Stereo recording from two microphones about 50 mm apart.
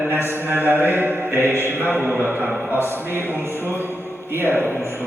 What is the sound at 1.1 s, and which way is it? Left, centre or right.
Music, right.